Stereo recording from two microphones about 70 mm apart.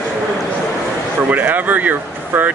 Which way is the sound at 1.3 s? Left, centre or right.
Right.